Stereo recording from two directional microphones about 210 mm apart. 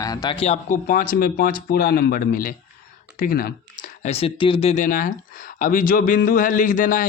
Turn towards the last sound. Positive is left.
turn(degrees=40)  # may be behind; listen again after turning